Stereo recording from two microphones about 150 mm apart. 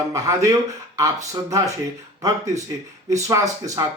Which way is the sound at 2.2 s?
20° right (ahead or behind).